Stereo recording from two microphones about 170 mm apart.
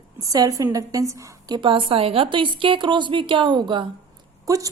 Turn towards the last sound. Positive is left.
turn(degrees=-20)  # may be behind; listen again after turning